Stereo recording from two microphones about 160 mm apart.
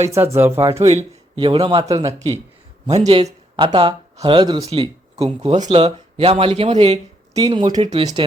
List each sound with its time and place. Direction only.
0.0 s speech: 20° right (ahead or behind)
0.8 s a man's voice: 40° right (ahead or behind)
2.8 s a man's voice: 40° right (ahead or behind)
3.2 s a man's voice: 30° right (ahead or behind)
7.3 s speech: 25° right (ahead or behind)